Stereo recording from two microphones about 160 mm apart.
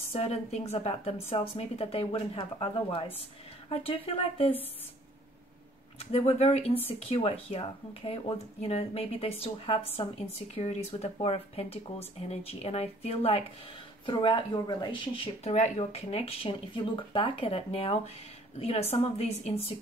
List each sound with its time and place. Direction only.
0.2 s speech: 40° left (ahead or behind)
5.9 s speech: 40° left (ahead or behind)